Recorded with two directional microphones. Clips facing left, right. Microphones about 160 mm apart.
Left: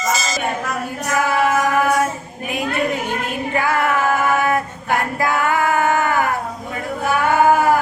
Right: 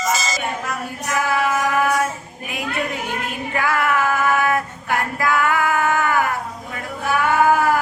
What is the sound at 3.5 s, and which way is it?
Female singing, 25° left (ahead or behind).